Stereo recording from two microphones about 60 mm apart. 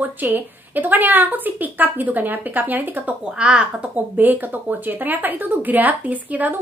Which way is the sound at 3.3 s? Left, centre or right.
Centre.